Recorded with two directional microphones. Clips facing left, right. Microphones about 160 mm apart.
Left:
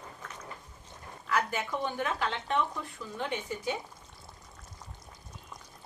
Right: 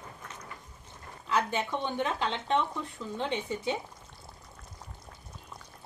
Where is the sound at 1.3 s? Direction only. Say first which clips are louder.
Right 2 dB; 25° right (ahead or behind).